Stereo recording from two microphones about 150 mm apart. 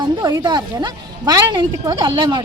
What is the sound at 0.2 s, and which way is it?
A woman's voice, 25° right (ahead or behind).